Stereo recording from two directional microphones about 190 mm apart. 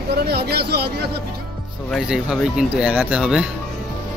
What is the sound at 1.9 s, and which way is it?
Speech, 5° right (ahead or behind).